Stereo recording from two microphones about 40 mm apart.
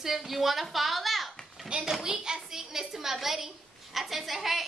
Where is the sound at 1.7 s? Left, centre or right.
Right.